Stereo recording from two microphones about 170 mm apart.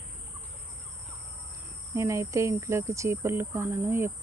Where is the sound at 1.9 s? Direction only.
15° right (ahead or behind).